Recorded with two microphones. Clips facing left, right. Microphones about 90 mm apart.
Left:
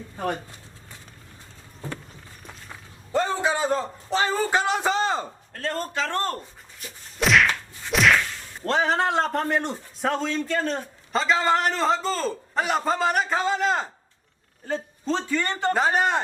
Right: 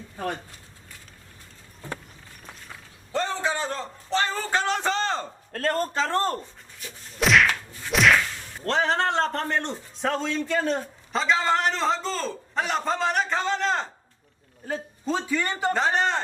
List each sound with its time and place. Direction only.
3.1 s a sound: 10° left (ahead or behind)
5.5 s speech: 45° right (ahead or behind)
6.4 s whip: centre (ahead or behind)
8.6 s a man's voice: 5° left (ahead or behind)
14.7 s a man's voice: 5° right (ahead or behind)
15.7 s speech: 5° left (ahead or behind)